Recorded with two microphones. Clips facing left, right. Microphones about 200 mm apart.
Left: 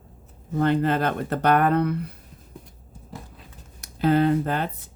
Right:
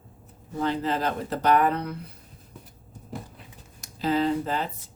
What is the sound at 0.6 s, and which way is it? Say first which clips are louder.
Speech: left 5 dB; 60° left (ahead or behind).